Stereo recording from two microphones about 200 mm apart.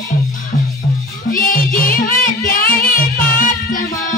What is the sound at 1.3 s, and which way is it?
Music, 45° left (ahead or behind).